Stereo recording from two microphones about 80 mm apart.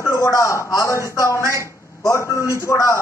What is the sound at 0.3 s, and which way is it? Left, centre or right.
A man's voice, left.